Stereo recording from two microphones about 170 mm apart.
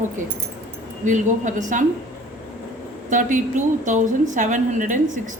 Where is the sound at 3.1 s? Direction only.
50° right (ahead or behind).